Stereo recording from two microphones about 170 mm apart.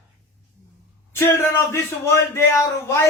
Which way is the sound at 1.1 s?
15° left (ahead or behind).